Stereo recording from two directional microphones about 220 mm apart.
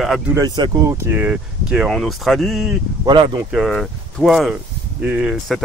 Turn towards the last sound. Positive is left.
turn(degrees=-5)  # may be behind; listen again after turning